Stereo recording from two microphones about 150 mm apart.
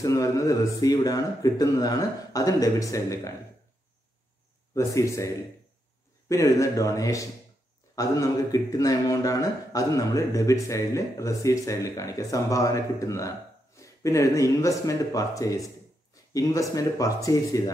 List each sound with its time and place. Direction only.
0.0 s a man's voice: 20° left (ahead or behind)
4.7 s a man's voice: 20° left (ahead or behind)
16.7 s a man's voice: 25° left (ahead or behind)